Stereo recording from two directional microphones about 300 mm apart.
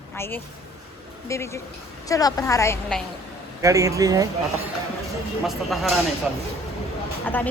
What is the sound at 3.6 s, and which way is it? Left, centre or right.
Speech, centre.